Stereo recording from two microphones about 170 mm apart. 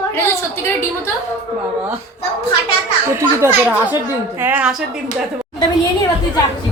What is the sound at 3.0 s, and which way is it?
A woman's voice, 15° right (ahead or behind).